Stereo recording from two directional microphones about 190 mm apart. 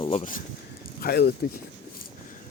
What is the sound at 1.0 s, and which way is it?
Speech, 55° left (ahead or behind).